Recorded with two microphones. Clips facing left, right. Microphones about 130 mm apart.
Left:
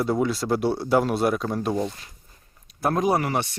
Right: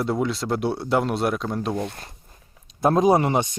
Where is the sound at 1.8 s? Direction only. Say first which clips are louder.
Left 1 dB; 55° right (ahead or behind).